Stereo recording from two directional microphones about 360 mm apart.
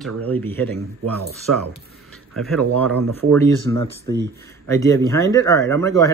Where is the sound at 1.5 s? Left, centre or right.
Right.